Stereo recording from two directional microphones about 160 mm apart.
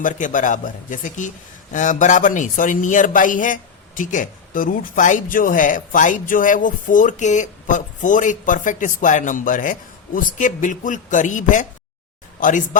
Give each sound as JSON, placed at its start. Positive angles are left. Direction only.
{"t": 0.0, "sound": "a man's voice", "side_deg": 55}